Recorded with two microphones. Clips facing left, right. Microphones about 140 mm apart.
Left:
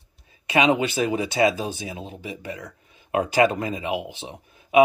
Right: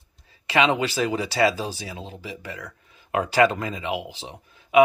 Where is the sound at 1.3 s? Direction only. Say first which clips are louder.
Left 1 dB; 20° left (ahead or behind).